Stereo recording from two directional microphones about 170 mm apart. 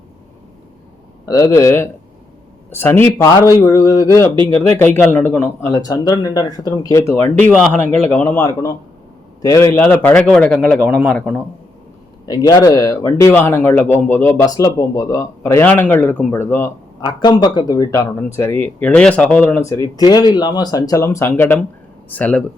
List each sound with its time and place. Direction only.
1.2 s speech: 20° left (ahead or behind)
12.2 s speech: 20° left (ahead or behind)
17.0 s speech: 25° left (ahead or behind); by 22.4 s 10° left (ahead or behind)